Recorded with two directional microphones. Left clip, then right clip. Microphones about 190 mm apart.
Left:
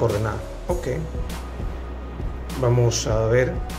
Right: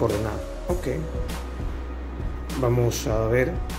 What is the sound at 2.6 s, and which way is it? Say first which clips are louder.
Speech: left 3 dB; 15° right (ahead or behind).